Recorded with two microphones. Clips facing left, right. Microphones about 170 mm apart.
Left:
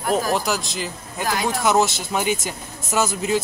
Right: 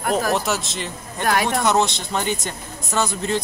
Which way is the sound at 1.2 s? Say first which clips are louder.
Right 3 dB; 60° right (ahead or behind).